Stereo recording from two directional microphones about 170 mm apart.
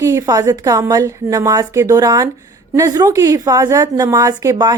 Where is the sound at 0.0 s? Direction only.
20° right (ahead or behind).